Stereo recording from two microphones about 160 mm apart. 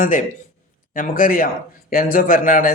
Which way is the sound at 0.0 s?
60° left (ahead or behind).